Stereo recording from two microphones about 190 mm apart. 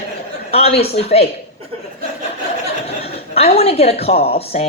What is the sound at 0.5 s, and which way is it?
Speech, 30° left (ahead or behind).